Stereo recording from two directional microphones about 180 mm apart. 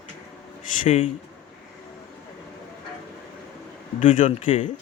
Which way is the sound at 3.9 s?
45° left (ahead or behind).